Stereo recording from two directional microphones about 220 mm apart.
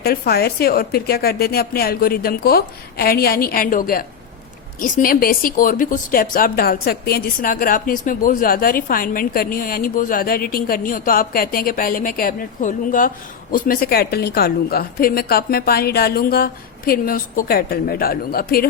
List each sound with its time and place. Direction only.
0.0 s a woman's voice: 45° left (ahead or behind)